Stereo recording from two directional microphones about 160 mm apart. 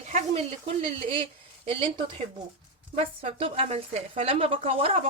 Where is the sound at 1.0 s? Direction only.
35° right (ahead or behind).